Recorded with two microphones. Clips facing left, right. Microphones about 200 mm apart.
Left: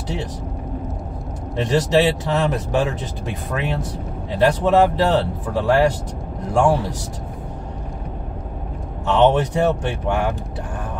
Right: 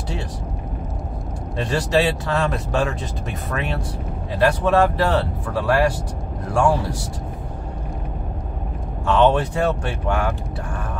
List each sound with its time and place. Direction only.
1.6 s speech: 20° left (ahead or behind)
9.0 s speech: 20° left (ahead or behind)